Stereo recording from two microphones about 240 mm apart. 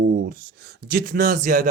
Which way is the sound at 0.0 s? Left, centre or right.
Right.